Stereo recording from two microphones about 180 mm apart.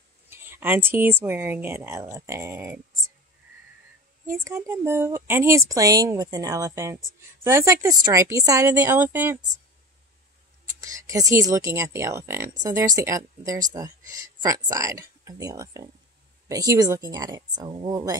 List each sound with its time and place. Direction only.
0.3 s a sound: 10° right (ahead or behind)
1.2 s speech: 15° right (ahead or behind)
4.3 s speech: 15° right (ahead or behind)
10.8 s speech: 20° right (ahead or behind)